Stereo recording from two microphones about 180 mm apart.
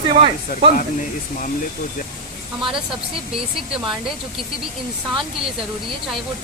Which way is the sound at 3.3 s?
5° right (ahead or behind).